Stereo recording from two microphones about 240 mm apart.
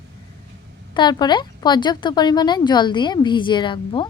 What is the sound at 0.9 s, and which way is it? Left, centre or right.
Speech, centre.